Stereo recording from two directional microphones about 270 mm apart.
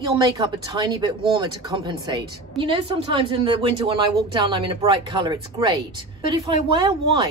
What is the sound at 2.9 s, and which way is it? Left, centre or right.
Speech, centre.